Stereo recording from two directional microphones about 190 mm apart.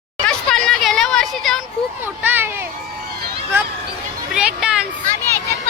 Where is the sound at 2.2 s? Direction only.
10° right (ahead or behind).